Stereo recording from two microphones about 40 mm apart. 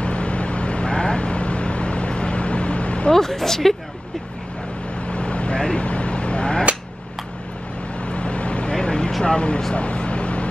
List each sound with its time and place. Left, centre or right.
0.0 s vehicle: left
3.1 s speech: centre
5.0 s vehicle: left
8.0 s vehicle: left